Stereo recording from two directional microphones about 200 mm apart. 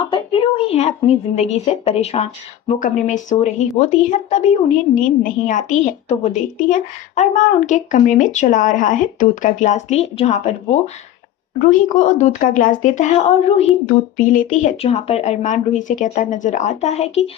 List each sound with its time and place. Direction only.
0.1 s a sound: 25° left (ahead or behind)
1.4 s a woman's voice: 35° left (ahead or behind)
11.6 s a woman's voice: 40° left (ahead or behind)